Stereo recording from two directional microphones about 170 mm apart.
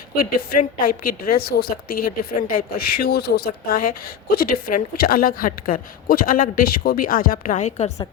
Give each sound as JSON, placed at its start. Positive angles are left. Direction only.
{"t": 0.2, "sound": "speech", "side_deg": 55}